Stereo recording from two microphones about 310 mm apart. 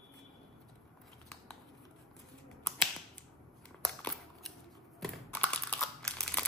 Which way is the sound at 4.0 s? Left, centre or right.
Centre.